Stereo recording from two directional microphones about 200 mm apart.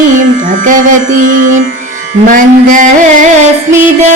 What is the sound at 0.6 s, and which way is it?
Music, 40° right (ahead or behind).